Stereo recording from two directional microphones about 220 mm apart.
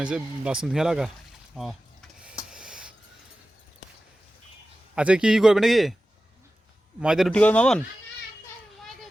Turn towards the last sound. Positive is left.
turn(degrees=5)  # may be behind; listen again after turning